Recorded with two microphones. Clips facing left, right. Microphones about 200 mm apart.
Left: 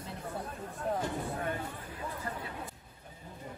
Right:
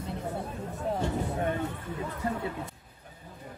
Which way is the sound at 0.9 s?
25° right (ahead or behind).